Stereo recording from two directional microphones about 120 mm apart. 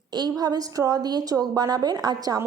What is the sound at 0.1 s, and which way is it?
A woman's voice, 35° right (ahead or behind).